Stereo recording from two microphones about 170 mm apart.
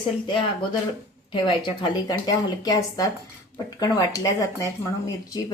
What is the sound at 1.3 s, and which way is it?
Speech, 25° left (ahead or behind).